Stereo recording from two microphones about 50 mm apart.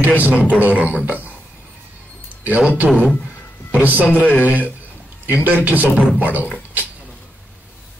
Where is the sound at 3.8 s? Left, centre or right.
Right.